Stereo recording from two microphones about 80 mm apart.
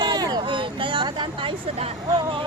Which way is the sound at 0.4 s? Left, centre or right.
Right.